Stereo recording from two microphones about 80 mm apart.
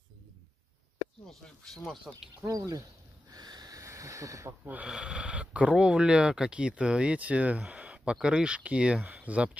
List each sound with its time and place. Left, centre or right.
1.6 s speech: centre
2.4 s speech: right
3.3 s a sound: right
4.5 s speech: centre